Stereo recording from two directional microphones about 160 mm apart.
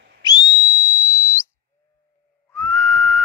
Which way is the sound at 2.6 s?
5° left (ahead or behind).